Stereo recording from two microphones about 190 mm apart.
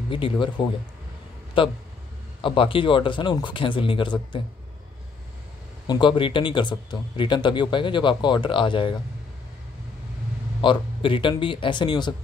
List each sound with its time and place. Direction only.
0.1 s speech: 25° left (ahead or behind)
5.9 s speech: 25° left (ahead or behind)
10.6 s speech: 25° left (ahead or behind)